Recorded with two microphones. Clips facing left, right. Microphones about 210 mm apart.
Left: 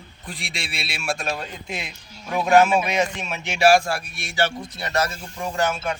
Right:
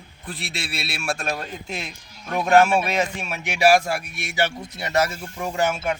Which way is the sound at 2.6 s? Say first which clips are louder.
Left 1 dB; 5° right (ahead or behind).